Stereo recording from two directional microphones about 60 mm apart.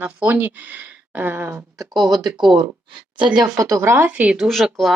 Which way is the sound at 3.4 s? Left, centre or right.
Right.